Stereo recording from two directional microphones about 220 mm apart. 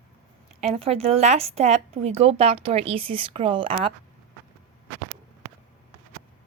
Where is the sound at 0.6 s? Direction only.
25° right (ahead or behind).